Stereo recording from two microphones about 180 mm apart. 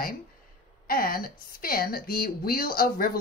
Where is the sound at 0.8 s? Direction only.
55° left (ahead or behind).